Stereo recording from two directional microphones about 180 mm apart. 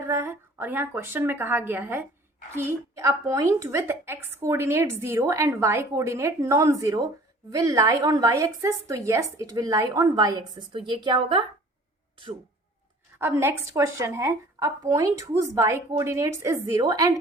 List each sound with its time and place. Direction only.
0.0 s a woman's voice: 15° right (ahead or behind)
13.1 s a woman's voice: 15° right (ahead or behind)